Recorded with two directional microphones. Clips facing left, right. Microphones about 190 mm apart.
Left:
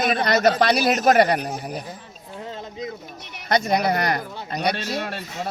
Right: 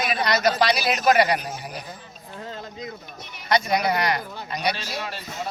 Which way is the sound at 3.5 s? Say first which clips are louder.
Left 2 dB; 50° left (ahead or behind).